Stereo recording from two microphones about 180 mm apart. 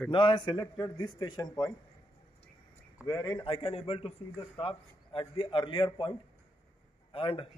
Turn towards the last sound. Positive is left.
turn(degrees=30)  # may be behind; listen again after turning